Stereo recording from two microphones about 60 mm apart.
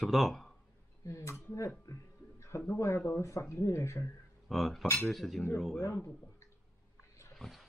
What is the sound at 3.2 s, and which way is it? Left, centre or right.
Speech, left.